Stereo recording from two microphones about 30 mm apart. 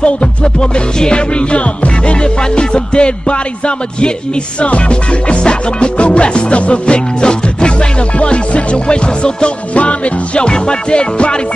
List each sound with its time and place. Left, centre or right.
0.0 s music: left
1.5 s music: left
2.2 s music: left
8.2 s music: left